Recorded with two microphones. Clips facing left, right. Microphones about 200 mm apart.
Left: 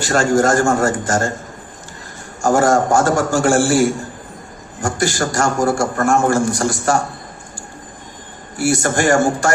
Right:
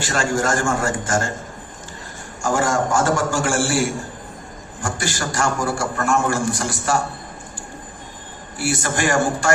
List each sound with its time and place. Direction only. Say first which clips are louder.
0.0 s a man's voice: left 6 dB; 45° left (ahead or behind)
2.4 s a man's voice: left 6 dB; 40° left (ahead or behind)
8.5 s a man's voice: left 6 dB; 45° left (ahead or behind)